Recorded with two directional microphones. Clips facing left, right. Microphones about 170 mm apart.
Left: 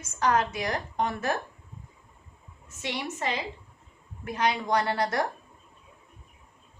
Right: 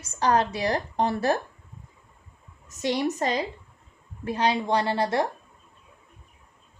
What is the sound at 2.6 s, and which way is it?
Speech, 40° right (ahead or behind).